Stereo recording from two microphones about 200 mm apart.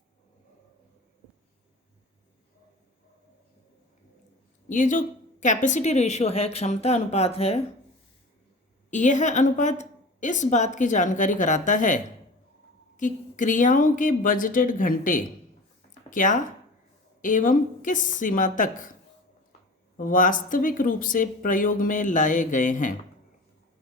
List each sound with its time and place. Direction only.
4.7 s a woman's voice: 40° left (ahead or behind)
8.9 s a woman's voice: 35° left (ahead or behind)
13.0 s a woman's voice: 40° left (ahead or behind)
20.0 s a woman's voice: 40° left (ahead or behind)